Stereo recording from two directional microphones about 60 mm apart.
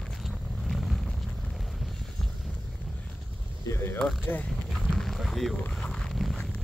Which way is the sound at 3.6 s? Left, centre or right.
Left.